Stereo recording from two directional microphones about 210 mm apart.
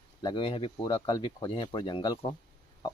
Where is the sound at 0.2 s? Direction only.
25° left (ahead or behind).